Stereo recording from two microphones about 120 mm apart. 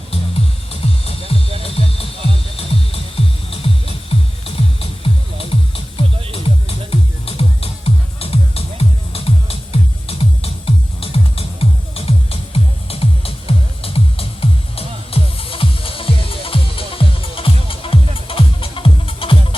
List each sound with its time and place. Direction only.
0.1 s music: 50° left (ahead or behind)